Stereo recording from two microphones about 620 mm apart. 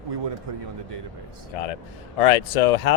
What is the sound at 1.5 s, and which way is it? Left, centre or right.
Speech, left.